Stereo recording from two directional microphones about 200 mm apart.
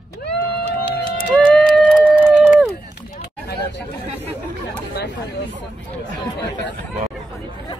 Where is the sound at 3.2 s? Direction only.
55° left (ahead or behind).